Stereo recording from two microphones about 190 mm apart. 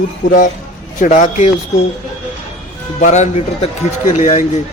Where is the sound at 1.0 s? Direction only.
40° left (ahead or behind).